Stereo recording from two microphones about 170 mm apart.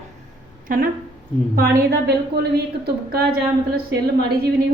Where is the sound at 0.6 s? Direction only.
55° right (ahead or behind).